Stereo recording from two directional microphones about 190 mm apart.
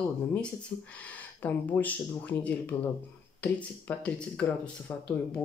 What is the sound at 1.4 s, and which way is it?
Speech, 10° left (ahead or behind).